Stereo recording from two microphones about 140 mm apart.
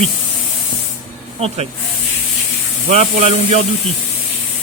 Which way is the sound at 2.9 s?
50° right (ahead or behind).